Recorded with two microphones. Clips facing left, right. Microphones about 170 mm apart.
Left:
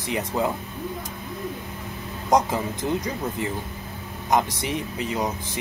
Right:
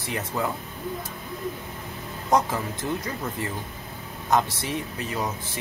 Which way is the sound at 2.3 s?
15° left (ahead or behind).